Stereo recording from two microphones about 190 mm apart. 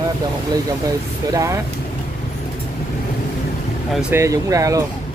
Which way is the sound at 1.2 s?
15° right (ahead or behind).